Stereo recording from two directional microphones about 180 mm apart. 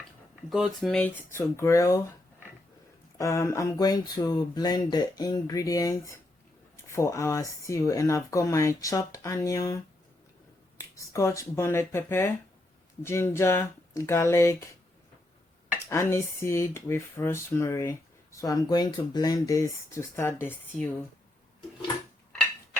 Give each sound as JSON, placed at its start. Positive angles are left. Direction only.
{"t": 0.5, "sound": "speech", "side_deg": 0}
{"t": 3.2, "sound": "speech", "side_deg": 15}
{"t": 15.9, "sound": "speech", "side_deg": 15}
{"t": 22.3, "sound": "a sound", "side_deg": 5}